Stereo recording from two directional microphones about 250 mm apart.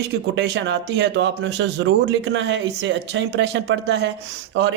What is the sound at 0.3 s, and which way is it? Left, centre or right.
Speech, right.